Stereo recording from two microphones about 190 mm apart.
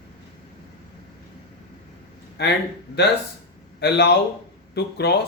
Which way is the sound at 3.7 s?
60° left (ahead or behind).